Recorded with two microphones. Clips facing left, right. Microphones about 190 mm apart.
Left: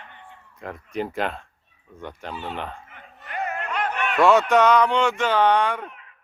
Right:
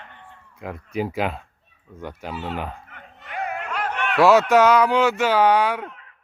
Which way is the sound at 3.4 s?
5° right (ahead or behind).